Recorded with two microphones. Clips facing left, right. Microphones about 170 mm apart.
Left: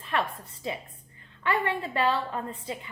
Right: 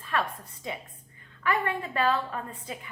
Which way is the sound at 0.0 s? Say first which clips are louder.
Left 1 dB; 25° left (ahead or behind).